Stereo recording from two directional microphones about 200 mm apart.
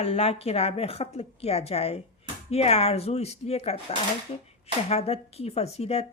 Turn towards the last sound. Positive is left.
turn(degrees=30)  # may be behind; listen again after turning